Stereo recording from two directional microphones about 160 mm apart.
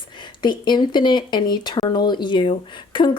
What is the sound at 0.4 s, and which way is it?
Speech, 30° left (ahead or behind).